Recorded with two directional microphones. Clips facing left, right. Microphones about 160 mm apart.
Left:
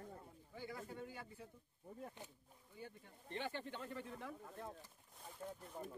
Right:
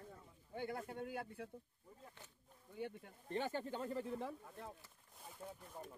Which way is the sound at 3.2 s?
40° right (ahead or behind).